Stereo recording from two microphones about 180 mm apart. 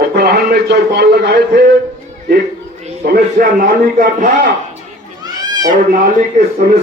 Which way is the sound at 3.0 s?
55° right (ahead or behind).